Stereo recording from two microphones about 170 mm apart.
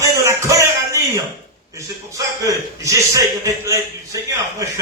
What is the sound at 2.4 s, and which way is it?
Speech, 20° right (ahead or behind).